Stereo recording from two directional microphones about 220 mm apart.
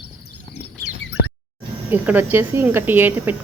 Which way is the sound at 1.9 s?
10° right (ahead or behind).